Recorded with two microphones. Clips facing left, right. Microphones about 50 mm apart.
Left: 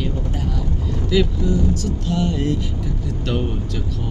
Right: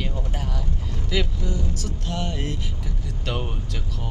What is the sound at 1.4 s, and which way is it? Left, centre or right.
Speech, left.